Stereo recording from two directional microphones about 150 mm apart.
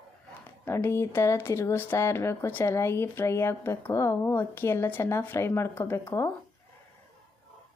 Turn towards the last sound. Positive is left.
turn(degrees=20)  # may be behind; listen again after turning